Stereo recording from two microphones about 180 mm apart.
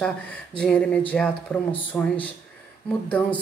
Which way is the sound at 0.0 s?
5° left (ahead or behind).